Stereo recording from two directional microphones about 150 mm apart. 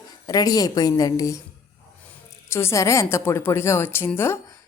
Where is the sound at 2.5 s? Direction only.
15° left (ahead or behind).